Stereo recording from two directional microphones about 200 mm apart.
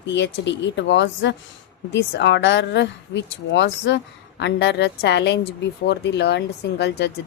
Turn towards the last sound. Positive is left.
turn(degrees=60)  # may be behind; listen again after turning